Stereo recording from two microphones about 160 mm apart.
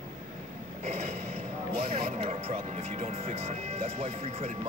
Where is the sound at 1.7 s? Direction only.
40° right (ahead or behind).